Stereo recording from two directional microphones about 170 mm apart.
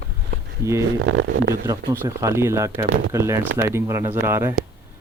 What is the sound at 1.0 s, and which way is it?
Speech, 90° right.